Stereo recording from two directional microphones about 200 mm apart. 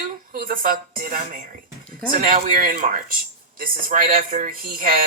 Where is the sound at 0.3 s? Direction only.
45° right (ahead or behind).